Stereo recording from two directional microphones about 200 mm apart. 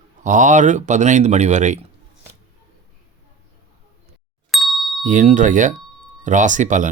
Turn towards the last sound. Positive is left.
turn(degrees=-40)  # may be behind; listen again after turning